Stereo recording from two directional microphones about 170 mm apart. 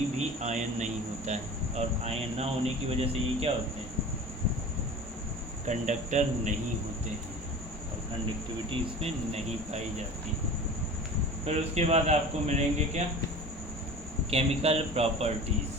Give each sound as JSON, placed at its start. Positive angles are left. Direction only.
{"t": 0.2, "sound": "a man's voice", "side_deg": -45}
{"t": 5.6, "sound": "speech", "side_deg": -45}
{"t": 8.7, "sound": "a man's voice", "side_deg": -40}
{"t": 11.4, "sound": "a man's voice", "side_deg": -40}
{"t": 14.3, "sound": "a man's voice", "side_deg": -35}